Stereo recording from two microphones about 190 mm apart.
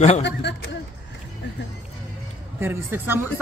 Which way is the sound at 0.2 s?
65° left (ahead or behind).